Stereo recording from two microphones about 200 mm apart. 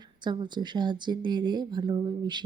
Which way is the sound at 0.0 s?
20° right (ahead or behind).